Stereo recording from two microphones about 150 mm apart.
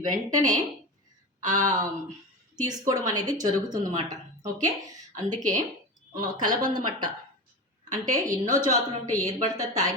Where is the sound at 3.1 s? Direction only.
25° right (ahead or behind).